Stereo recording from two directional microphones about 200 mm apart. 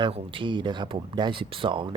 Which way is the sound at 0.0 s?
25° right (ahead or behind).